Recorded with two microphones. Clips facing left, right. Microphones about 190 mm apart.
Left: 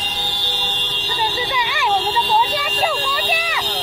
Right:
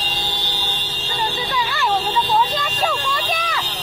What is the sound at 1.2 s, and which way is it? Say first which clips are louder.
Vehicle: left 1 dB; 10° left (ahead or behind).